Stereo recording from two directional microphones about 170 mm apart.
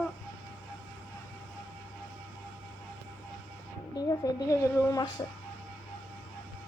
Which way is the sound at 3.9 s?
20° left (ahead or behind).